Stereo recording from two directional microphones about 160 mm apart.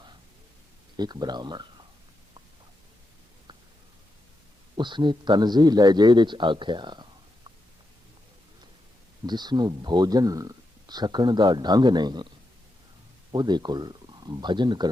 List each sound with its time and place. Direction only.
0.9 s speech: 25° right (ahead or behind)
4.8 s speech: 30° right (ahead or behind)
9.2 s speech: 25° right (ahead or behind)
13.3 s speech: 25° right (ahead or behind)